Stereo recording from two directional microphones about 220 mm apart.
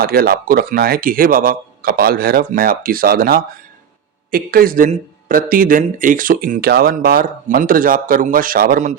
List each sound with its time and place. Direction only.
0.0 s speech: 45° right (ahead or behind)